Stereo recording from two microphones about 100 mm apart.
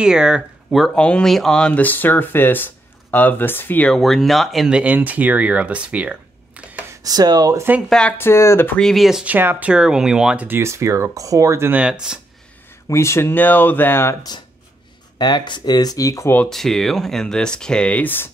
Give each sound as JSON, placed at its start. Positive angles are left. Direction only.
{"t": 0.0, "sound": "speech", "side_deg": -10}
{"t": 3.9, "sound": "speech", "side_deg": 0}
{"t": 6.9, "sound": "speech", "side_deg": -40}
{"t": 7.5, "sound": "speech", "side_deg": -20}
{"t": 8.2, "sound": "speech", "side_deg": 25}
{"t": 8.7, "sound": "speech", "side_deg": 5}
{"t": 9.2, "sound": "speech", "side_deg": -20}
{"t": 11.7, "sound": "speech", "side_deg": -10}
{"t": 12.8, "sound": "speech", "side_deg": 30}
{"t": 15.1, "sound": "speech", "side_deg": 50}
{"t": 16.4, "sound": "speech", "side_deg": 5}